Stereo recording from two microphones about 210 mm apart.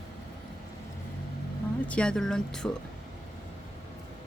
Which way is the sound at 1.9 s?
5° left (ahead or behind).